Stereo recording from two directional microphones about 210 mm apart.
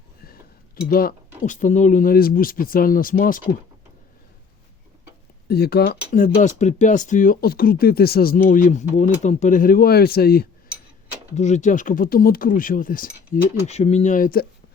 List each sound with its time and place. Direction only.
0.8 s speech: 45° left (ahead or behind)
5.5 s speech: 50° left (ahead or behind)
11.3 s speech: 35° left (ahead or behind)